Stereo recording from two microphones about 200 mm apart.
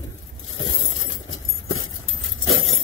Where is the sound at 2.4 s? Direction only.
90° left.